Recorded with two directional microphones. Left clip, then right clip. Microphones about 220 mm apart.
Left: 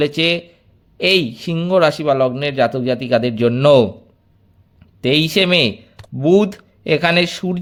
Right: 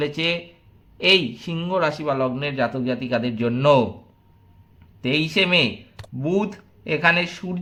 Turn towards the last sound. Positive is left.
turn(degrees=40)  # may be behind; listen again after turning